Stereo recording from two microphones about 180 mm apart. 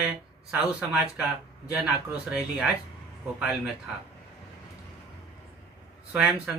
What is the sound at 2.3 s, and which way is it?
Speech, 5° right (ahead or behind).